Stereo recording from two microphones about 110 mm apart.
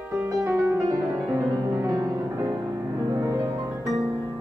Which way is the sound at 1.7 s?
35° right (ahead or behind).